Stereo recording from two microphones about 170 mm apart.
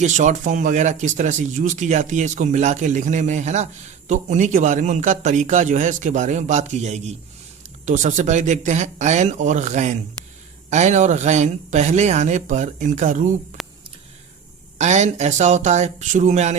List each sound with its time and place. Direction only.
0.0 s speech: 45° right (ahead or behind)
13.6 s a sound: centre (ahead or behind)
14.8 s speech: 40° right (ahead or behind)